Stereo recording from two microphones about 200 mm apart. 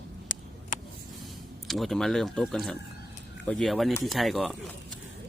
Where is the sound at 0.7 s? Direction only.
40° left (ahead or behind).